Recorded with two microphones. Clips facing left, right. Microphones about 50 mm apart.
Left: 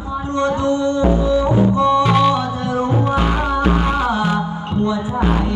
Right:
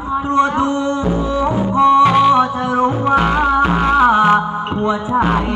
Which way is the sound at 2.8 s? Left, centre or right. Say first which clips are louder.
Right 4 dB; right.